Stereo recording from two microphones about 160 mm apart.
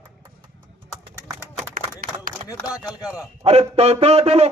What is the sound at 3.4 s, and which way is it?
A man's voice, 40° right (ahead or behind).